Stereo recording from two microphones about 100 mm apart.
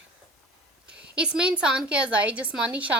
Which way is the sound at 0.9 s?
10° right (ahead or behind).